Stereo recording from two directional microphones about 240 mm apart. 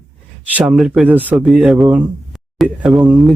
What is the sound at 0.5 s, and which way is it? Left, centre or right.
Speech, centre.